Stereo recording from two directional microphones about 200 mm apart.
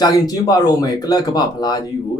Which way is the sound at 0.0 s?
20° left (ahead or behind).